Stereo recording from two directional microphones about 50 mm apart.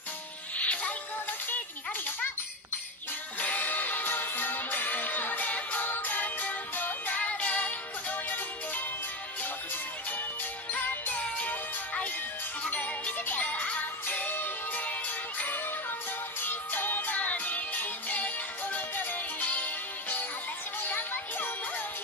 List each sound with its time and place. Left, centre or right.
0.6 s music: left
3.3 s music: left
10.7 s music: left